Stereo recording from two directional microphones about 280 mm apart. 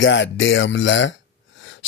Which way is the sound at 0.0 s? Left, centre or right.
Left.